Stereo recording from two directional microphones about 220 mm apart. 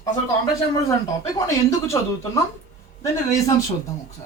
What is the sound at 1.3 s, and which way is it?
Speech, 15° left (ahead or behind).